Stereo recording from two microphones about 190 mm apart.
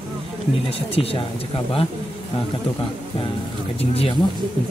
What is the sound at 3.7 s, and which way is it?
Speech, 30° left (ahead or behind).